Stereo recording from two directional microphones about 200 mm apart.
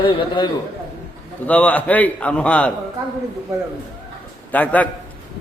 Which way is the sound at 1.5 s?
5° left (ahead or behind).